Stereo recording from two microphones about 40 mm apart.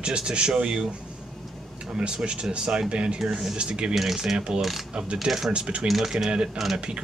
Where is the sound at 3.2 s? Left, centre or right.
Centre.